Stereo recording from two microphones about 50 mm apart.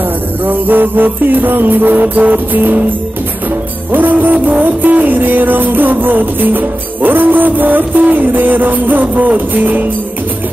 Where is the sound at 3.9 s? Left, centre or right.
Right.